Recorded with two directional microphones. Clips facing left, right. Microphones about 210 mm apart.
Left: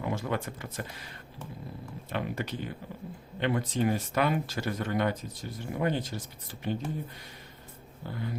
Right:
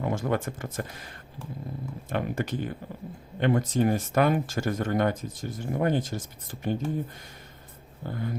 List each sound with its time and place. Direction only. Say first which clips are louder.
0.0 s speech: right 4 dB; 50° right (ahead or behind)
8.0 s speech: right 4 dB; 50° right (ahead or behind)